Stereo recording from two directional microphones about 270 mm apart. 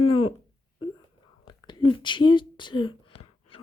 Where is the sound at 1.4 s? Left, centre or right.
Centre.